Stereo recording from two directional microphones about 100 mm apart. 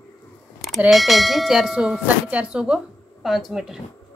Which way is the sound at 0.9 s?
Centre (ahead or behind).